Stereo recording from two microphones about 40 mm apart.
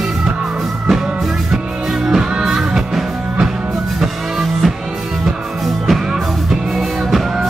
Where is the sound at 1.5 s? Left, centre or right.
Centre.